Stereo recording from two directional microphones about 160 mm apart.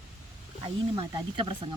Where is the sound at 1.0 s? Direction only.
30° right (ahead or behind).